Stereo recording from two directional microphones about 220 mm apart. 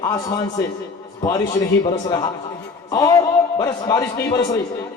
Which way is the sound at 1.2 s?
20° left (ahead or behind).